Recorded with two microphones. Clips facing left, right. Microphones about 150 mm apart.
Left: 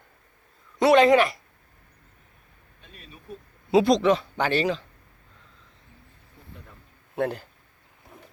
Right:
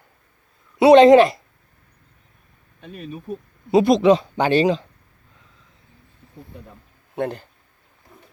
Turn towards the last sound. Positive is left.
turn(degrees=5)  # may be behind; listen again after turning